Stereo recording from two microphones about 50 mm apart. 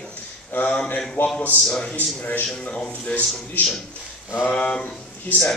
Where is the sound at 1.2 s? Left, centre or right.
Left.